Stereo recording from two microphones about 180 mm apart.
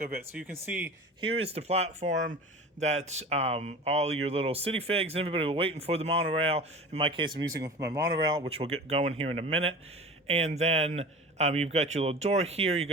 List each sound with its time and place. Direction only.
0.3 s speech: 10° right (ahead or behind)
1.2 s speech: 35° right (ahead or behind)